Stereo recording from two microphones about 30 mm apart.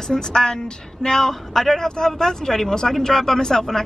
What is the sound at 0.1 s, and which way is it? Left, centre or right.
Speech, left.